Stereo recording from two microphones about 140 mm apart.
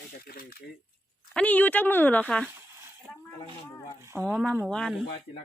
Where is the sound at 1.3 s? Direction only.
10° left (ahead or behind).